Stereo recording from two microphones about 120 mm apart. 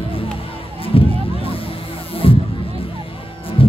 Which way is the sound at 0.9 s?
50° left (ahead or behind).